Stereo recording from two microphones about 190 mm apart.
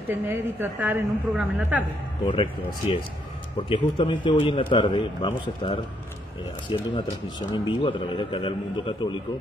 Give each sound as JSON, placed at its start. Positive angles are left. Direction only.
{"t": 0.1, "sound": "a woman's voice", "side_deg": -10}
{"t": 2.2, "sound": "a man's voice", "side_deg": 25}